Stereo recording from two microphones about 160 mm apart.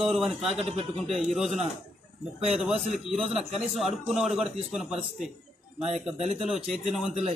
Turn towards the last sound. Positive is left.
turn(degrees=0)  # may be behind; listen again after turning